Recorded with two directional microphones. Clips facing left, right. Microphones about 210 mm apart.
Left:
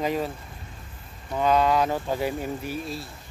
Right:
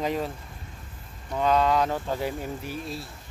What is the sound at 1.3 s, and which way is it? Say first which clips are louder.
Speech: left 1 dB; 10° left (ahead or behind).